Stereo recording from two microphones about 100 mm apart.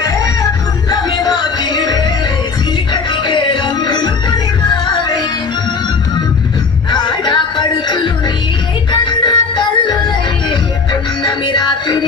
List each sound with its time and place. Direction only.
1.2 s music: 50° left (ahead or behind)
6.9 s music: 50° left (ahead or behind)
11.2 s music: 50° left (ahead or behind)